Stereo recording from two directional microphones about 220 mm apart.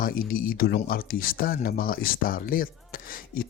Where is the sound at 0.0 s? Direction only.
40° left (ahead or behind).